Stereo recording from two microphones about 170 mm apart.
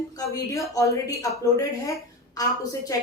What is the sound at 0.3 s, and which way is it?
A woman's voice, 20° left (ahead or behind).